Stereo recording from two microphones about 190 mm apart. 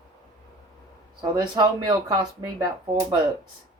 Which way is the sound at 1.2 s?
25° right (ahead or behind).